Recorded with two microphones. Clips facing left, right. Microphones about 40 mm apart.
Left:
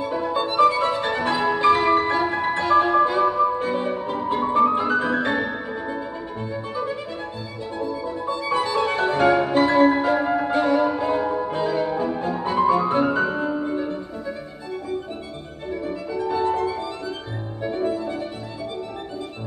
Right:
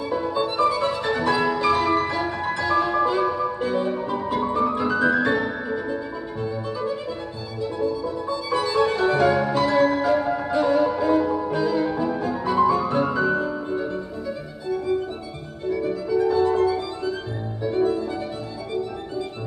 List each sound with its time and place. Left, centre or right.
0.0 s music: left
16.3 s music: left